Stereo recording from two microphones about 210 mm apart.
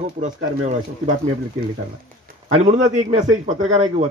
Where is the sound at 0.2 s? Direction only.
35° right (ahead or behind).